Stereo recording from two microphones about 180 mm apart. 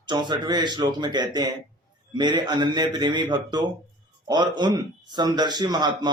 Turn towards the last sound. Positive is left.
turn(degrees=-25)  # may be behind; listen again after turning